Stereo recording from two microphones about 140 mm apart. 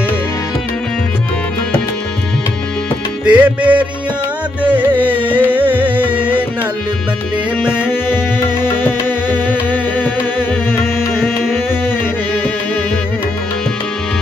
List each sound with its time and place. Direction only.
3.3 s music: 10° right (ahead or behind)
7.6 s music: 5° right (ahead or behind)
8.6 s music: 15° left (ahead or behind)
10.8 s music: 5° right (ahead or behind)